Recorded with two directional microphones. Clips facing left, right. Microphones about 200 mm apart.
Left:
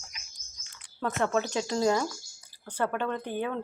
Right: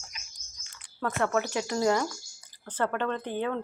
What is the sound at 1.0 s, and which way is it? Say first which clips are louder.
Speech: even; 20° left (ahead or behind).